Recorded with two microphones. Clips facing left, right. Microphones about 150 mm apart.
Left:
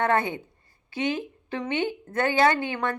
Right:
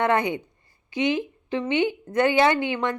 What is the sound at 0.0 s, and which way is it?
A woman's voice, 15° right (ahead or behind).